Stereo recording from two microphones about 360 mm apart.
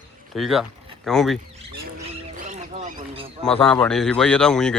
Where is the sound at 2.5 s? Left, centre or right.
Centre.